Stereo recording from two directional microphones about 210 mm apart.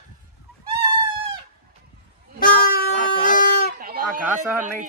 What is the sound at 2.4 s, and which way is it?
Goat, 45° left (ahead or behind).